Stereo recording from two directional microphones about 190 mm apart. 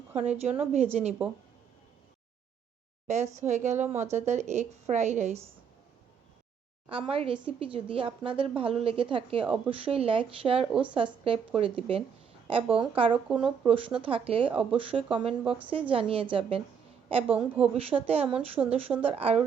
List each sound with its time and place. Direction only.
0.2 s a woman's voice: 35° right (ahead or behind)
3.1 s a woman's voice: 35° right (ahead or behind)
6.8 s speech: 30° right (ahead or behind)
10.7 s speech: 5° right (ahead or behind)
10.9 s speech: 30° right (ahead or behind)
13.2 s speech: 5° right (ahead or behind)
13.7 s speech: 30° right (ahead or behind)
14.5 s speech: 5° right (ahead or behind)
14.8 s speech: 30° right (ahead or behind)
17.2 s speech: 5° right (ahead or behind)
17.7 s a woman's voice: 30° right (ahead or behind)